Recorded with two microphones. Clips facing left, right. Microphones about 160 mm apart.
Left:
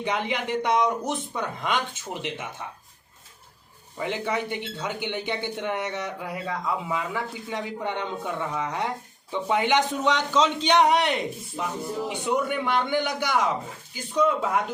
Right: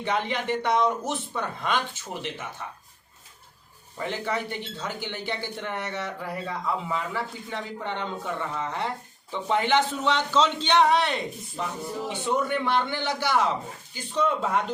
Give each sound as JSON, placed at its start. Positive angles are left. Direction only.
{"t": 0.0, "sound": "speech", "side_deg": 15}
{"t": 3.9, "sound": "a man's voice", "side_deg": 20}